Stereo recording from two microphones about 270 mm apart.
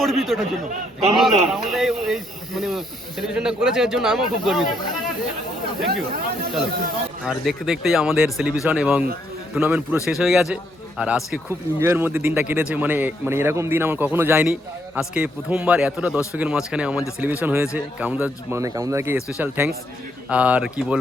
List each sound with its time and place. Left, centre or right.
0.0 s a man's voice: centre
5.8 s speech: right
7.3 s a man's voice: centre